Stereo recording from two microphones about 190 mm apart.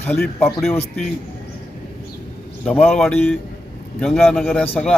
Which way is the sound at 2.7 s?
5° left (ahead or behind).